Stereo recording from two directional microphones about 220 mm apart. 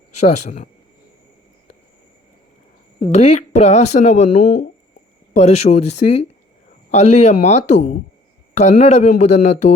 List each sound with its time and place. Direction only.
0.2 s speech: 35° left (ahead or behind)
3.0 s speech: 30° left (ahead or behind)